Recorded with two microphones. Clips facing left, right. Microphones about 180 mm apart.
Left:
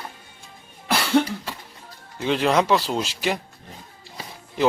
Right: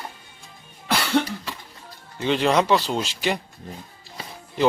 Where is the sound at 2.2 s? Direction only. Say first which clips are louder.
Even; centre (ahead or behind).